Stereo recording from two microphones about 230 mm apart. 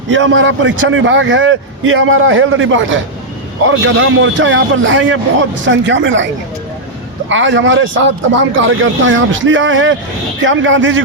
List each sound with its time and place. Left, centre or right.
0.1 s a man's voice: right
7.3 s a man's voice: right